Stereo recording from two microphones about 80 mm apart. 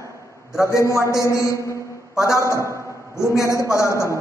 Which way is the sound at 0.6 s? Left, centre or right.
Left.